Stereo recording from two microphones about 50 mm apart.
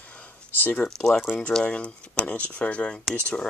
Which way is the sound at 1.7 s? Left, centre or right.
Left.